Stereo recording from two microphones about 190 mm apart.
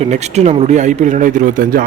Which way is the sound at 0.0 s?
35° right (ahead or behind).